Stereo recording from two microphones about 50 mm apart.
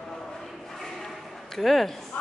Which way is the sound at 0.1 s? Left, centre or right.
Centre.